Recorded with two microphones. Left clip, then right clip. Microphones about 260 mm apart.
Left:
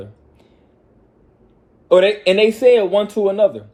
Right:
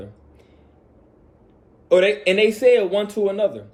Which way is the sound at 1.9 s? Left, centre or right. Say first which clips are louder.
Left 4 dB; centre.